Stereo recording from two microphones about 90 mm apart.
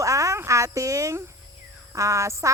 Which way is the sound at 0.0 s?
35° right (ahead or behind).